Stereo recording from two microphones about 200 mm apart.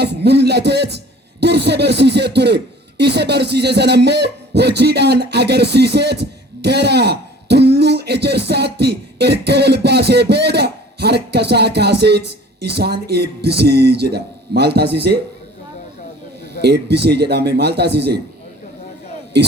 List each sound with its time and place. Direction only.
0.0 s a man's voice: 55° right (ahead or behind)
16.6 s a man's voice: 55° right (ahead or behind)